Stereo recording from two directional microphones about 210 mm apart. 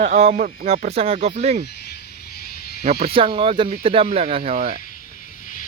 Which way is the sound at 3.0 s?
25° right (ahead or behind).